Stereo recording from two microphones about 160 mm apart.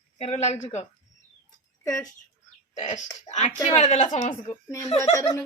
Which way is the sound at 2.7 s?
45° left (ahead or behind).